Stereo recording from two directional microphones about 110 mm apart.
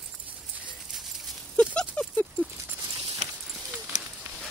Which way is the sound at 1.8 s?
10° left (ahead or behind).